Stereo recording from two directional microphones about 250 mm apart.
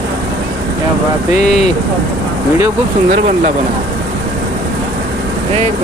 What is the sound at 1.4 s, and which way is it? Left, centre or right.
Speech, left.